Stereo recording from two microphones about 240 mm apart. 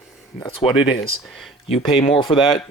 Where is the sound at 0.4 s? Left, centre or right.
Left.